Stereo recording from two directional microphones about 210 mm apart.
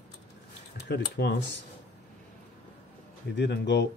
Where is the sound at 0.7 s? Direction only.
55° left (ahead or behind).